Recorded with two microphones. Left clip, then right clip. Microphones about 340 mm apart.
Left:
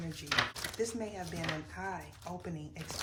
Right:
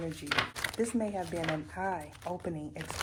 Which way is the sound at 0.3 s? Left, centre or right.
Right.